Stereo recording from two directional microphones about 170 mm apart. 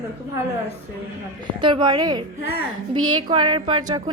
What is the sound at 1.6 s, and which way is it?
A woman's voice, 25° right (ahead or behind).